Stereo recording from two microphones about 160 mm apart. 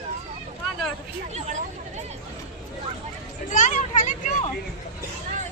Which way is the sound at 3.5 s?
55° left (ahead or behind).